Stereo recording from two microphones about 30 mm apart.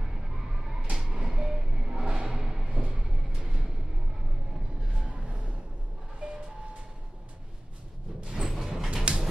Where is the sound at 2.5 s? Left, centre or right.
Centre.